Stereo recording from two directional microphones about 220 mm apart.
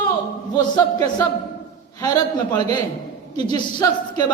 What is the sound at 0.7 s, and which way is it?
A woman's voice, 20° left (ahead or behind).